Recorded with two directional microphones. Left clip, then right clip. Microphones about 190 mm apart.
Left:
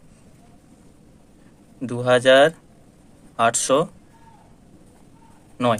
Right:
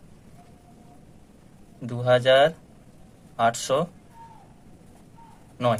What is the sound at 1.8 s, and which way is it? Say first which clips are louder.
Speech: left 3 dB; 40° left (ahead or behind).